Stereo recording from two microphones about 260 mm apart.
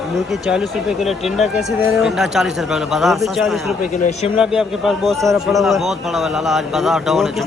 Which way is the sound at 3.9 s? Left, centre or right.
Left.